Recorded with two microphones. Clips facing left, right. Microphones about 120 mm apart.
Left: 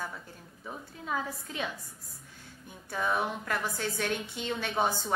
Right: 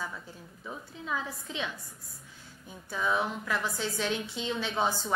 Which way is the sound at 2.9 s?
50° left (ahead or behind).